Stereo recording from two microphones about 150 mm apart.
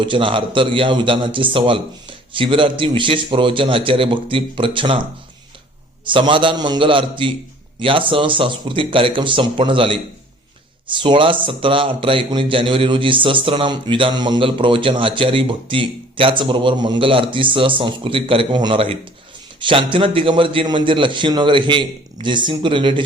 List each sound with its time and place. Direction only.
0.0 s a man's voice: 35° right (ahead or behind)
6.1 s a man's voice: 35° right (ahead or behind)